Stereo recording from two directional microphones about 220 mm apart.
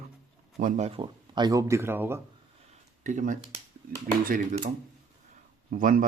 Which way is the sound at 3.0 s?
35° right (ahead or behind).